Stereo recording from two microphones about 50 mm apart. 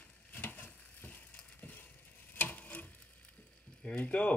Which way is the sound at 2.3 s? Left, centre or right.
Left.